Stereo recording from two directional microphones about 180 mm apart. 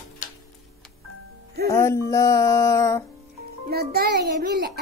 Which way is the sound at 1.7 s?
15° left (ahead or behind).